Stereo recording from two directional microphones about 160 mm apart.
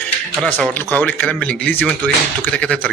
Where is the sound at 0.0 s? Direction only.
5° left (ahead or behind).